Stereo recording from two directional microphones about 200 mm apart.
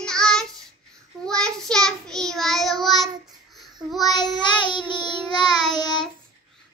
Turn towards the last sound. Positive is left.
turn(degrees=20)  # may be behind; listen again after turning